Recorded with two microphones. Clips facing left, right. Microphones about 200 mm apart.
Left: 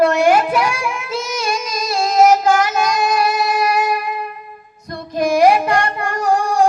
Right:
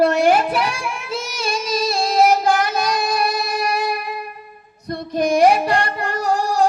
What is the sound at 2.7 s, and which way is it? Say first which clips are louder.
Child singing: left 3 dB; 35° right (ahead or behind).